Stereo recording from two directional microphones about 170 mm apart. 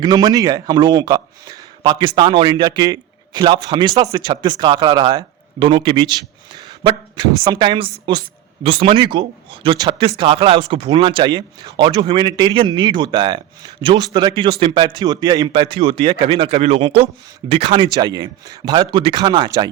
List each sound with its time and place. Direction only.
0.0 s a man's voice: 25° right (ahead or behind)